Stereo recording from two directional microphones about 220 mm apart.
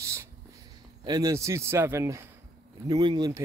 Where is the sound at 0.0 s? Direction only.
15° right (ahead or behind).